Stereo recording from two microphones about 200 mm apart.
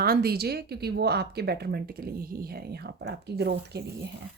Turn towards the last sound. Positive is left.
turn(degrees=-55)  # may be behind; listen again after turning